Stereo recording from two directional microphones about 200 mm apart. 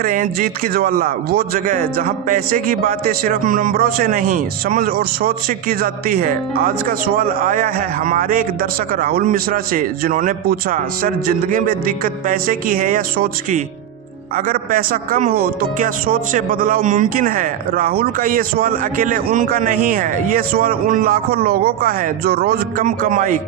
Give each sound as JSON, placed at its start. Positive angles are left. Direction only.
{"t": 0.0, "sound": "speech", "side_deg": -45}